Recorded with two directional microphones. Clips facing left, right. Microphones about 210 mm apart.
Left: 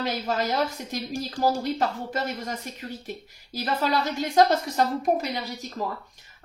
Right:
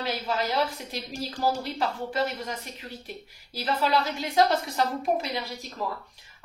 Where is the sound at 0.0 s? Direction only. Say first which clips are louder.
Left 2 dB; 45° left (ahead or behind).